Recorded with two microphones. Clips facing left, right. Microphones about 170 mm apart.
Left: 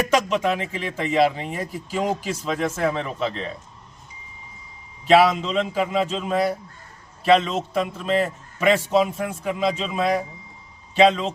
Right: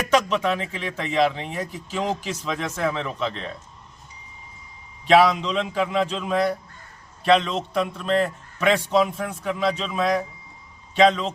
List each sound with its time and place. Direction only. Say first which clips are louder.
0.6 s a man's voice: left 2 dB; 5° left (ahead or behind)
5.1 s a man's voice: left 1 dB; 5° left (ahead or behind)